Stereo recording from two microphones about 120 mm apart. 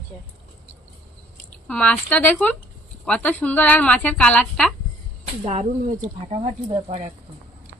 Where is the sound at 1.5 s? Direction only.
10° left (ahead or behind).